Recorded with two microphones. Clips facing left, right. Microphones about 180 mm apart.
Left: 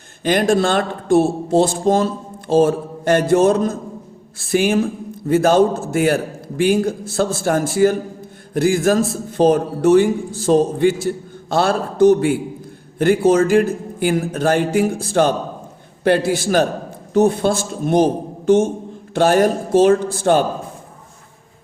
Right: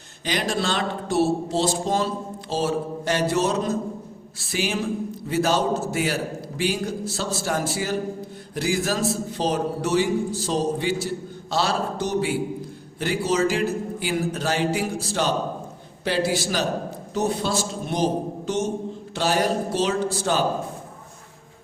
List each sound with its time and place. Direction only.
0.3 s a man's voice: 50° left (ahead or behind)